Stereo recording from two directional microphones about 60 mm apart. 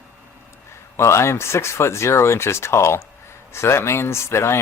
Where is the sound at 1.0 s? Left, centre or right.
Left.